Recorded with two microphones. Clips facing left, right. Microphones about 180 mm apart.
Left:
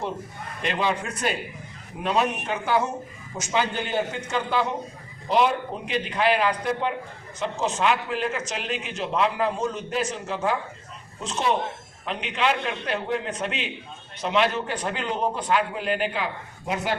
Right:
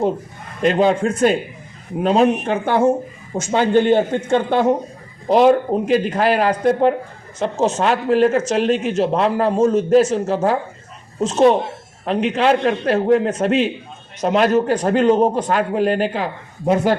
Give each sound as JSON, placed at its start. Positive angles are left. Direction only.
{"t": 0.6, "sound": "speech", "side_deg": -45}
{"t": 2.0, "sound": "a man's voice", "side_deg": -30}
{"t": 2.4, "sound": "a man's voice", "side_deg": -55}